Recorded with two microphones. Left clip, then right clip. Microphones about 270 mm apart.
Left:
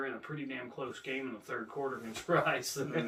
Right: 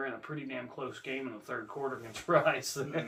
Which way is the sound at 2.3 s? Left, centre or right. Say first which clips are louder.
Right 3 dB; centre.